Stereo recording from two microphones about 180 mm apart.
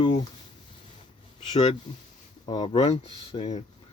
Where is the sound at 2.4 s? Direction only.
30° left (ahead or behind).